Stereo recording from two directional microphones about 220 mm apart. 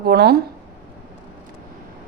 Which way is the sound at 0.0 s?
45° right (ahead or behind).